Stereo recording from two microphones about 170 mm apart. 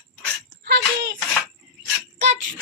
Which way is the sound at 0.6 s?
75° right (ahead or behind).